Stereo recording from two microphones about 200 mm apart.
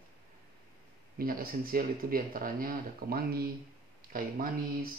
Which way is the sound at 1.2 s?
45° right (ahead or behind).